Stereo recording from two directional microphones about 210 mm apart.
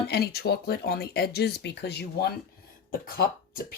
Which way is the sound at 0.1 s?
50° left (ahead or behind).